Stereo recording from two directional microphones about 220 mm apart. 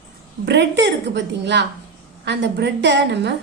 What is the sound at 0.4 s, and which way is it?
A woman's voice, 50° right (ahead or behind).